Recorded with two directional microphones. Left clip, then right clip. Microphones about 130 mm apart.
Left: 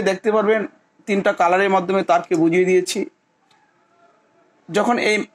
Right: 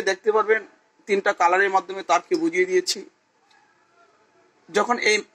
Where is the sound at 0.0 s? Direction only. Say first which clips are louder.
Left 3 dB; 75° left (ahead or behind).